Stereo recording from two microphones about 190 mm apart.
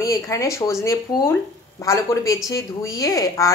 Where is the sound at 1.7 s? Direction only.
15° left (ahead or behind).